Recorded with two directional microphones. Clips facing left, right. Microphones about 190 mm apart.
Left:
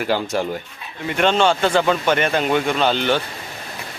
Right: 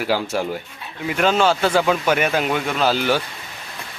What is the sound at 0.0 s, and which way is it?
Speech, 5° right (ahead or behind).